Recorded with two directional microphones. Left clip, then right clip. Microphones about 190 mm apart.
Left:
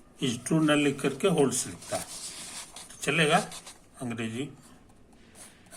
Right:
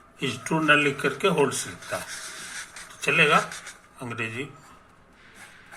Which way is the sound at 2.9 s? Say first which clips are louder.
Right 5 dB; 20° left (ahead or behind).